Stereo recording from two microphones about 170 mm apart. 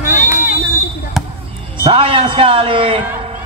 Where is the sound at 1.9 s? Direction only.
30° right (ahead or behind).